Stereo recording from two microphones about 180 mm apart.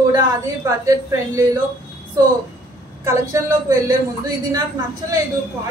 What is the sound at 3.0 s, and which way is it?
Speech, 15° right (ahead or behind).